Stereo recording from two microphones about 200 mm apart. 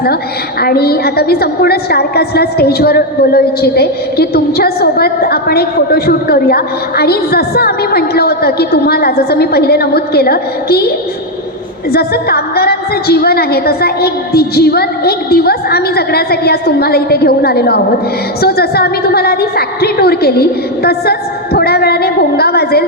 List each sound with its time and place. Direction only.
0.6 s a woman's voice: 50° left (ahead or behind)